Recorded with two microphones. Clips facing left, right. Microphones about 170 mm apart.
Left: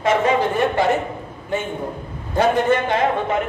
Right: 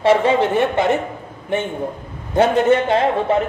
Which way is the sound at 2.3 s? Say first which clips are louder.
Right 3 dB; 25° right (ahead or behind).